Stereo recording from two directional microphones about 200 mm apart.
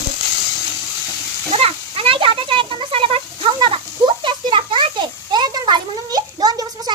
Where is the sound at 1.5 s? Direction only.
30° right (ahead or behind).